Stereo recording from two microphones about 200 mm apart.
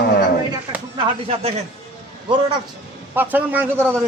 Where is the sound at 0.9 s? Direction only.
30° right (ahead or behind).